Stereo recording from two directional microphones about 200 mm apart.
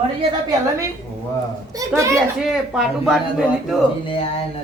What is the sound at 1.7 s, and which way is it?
Speech, 15° right (ahead or behind).